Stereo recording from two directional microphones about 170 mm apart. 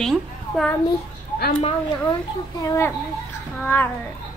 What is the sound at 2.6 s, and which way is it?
A woman's voice, 20° left (ahead or behind).